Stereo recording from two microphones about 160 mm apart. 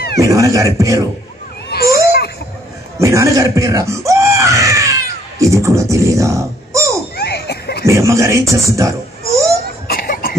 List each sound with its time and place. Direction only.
0.2 s speech: 20° right (ahead or behind)
1.7 s a sound: 80° left
3.0 s screaming: 20° right (ahead or behind)
5.4 s speech: 20° right (ahead or behind)
7.2 s a sound: 90° left
7.8 s speech: 20° right (ahead or behind)
9.8 s cough: 65° left (ahead or behind)